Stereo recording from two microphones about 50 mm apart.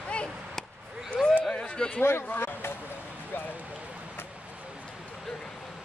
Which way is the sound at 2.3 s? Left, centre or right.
Left.